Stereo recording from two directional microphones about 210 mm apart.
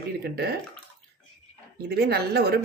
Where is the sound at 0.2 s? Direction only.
50° right (ahead or behind).